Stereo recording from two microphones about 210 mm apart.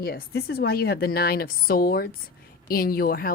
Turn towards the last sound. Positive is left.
turn(degrees=45)  # may be behind; listen again after turning